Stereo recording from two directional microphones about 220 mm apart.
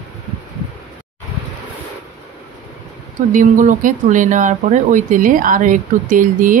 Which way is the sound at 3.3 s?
35° right (ahead or behind).